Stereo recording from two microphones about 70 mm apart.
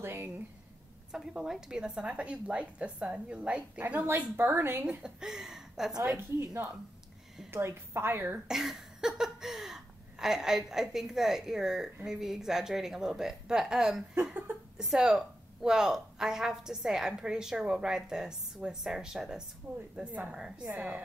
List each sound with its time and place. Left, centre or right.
0.0 s a sound: right
1.1 s a woman's voice: centre
3.8 s a woman's voice: right
4.8 s a woman's voice: centre
6.3 s a woman's voice: right
8.5 s a woman's voice: centre
19.7 s a woman's voice: right
20.0 s a woman's voice: centre